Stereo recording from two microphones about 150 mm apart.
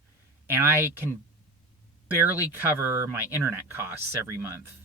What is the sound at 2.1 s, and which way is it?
Speech, 15° right (ahead or behind).